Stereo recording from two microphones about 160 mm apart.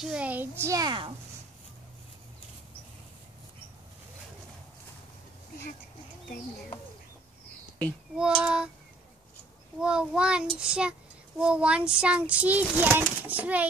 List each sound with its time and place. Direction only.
0.0 s child singing: 5° right (ahead or behind); by 1.1 s 30° right (ahead or behind)
8.2 s a child's voice: 5° right (ahead or behind)
9.8 s a child's voice: 5° right (ahead or behind)
10.7 s child singing: 5° right (ahead or behind)